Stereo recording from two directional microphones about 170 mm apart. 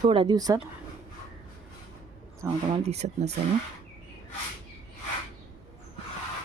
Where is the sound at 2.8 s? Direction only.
40° right (ahead or behind).